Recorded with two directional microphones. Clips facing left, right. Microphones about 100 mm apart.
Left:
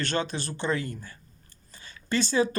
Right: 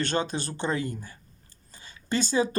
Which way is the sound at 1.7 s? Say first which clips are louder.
Even; 20° right (ahead or behind).